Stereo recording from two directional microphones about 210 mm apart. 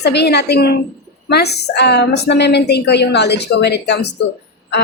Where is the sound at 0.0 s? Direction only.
50° left (ahead or behind).